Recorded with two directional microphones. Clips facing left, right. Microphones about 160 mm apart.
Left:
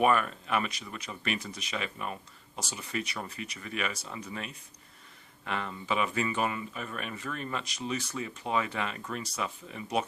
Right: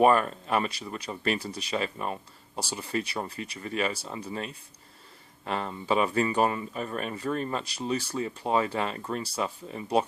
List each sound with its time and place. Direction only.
0.0 s speech: 35° right (ahead or behind)